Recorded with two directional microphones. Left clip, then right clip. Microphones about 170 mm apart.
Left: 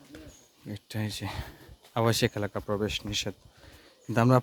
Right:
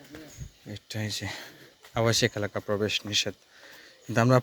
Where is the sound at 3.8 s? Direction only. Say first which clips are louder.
Right 1 dB; 20° left (ahead or behind).